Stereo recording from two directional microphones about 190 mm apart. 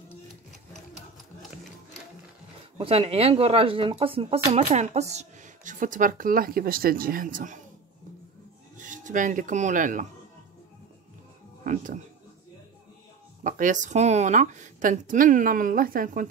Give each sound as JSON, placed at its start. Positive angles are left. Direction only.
{"t": 2.8, "sound": "speech", "side_deg": -30}
{"t": 8.7, "sound": "speech", "side_deg": -40}
{"t": 11.6, "sound": "speech", "side_deg": -40}
{"t": 13.4, "sound": "speech", "side_deg": -45}